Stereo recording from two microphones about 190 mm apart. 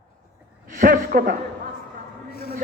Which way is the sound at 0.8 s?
45° right (ahead or behind).